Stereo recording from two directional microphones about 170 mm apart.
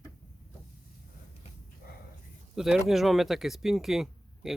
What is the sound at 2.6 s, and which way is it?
Speech, centre (ahead or behind).